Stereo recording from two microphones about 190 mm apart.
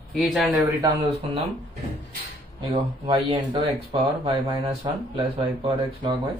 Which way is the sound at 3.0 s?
20° right (ahead or behind).